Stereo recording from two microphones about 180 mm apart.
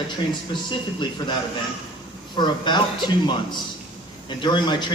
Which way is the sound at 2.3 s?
25° left (ahead or behind).